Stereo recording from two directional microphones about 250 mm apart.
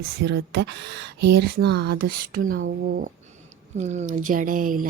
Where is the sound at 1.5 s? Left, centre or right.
Right.